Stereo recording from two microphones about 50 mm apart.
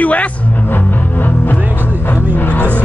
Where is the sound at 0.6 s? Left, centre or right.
Left.